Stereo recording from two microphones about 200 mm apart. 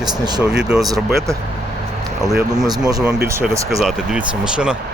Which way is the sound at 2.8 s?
20° right (ahead or behind).